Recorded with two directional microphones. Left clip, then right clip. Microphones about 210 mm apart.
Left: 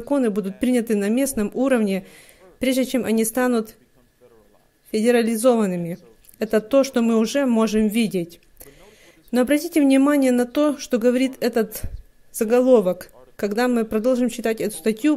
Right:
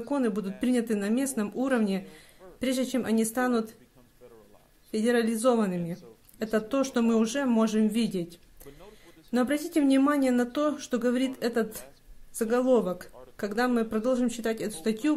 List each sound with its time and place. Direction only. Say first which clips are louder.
0.1 s speech: left 8 dB; 30° left (ahead or behind)
4.9 s speech: left 8 dB; 30° left (ahead or behind)